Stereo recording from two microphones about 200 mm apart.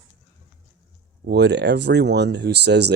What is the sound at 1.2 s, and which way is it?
Speech, 60° right (ahead or behind).